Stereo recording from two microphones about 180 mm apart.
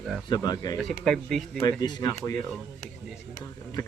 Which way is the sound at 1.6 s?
20° left (ahead or behind).